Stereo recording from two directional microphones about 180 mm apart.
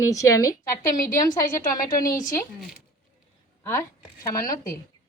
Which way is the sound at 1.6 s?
50° left (ahead or behind).